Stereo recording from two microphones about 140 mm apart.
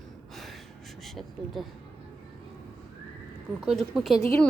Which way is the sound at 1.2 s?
Centre (ahead or behind).